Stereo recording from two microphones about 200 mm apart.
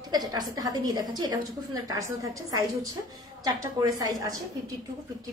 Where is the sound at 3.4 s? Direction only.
15° right (ahead or behind).